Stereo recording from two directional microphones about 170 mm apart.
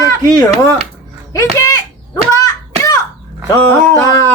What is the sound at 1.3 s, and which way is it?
Speech, 20° left (ahead or behind).